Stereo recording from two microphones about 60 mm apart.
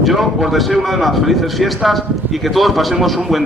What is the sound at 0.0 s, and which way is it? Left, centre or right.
A man's voice, centre.